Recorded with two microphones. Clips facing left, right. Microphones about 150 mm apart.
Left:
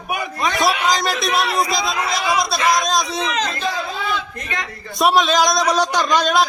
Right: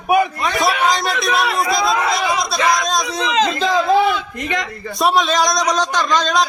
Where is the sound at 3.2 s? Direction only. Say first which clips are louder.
Right 5 dB; 90° right.